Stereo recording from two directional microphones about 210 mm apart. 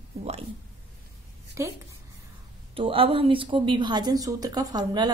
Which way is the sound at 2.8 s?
25° right (ahead or behind).